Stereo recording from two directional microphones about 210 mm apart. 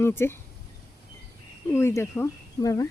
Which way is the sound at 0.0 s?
10° left (ahead or behind).